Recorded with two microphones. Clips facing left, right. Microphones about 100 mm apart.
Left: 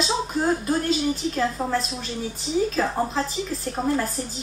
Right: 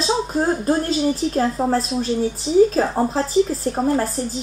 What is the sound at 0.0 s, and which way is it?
A woman's voice, 35° right (ahead or behind).